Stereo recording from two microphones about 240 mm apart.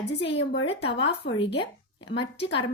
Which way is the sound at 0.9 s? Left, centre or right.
Left.